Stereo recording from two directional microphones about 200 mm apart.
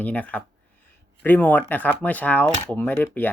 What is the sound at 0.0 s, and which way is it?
Speech, 5° left (ahead or behind).